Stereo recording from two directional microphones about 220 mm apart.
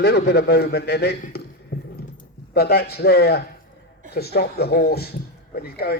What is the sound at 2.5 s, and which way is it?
A man's voice, 45° left (ahead or behind).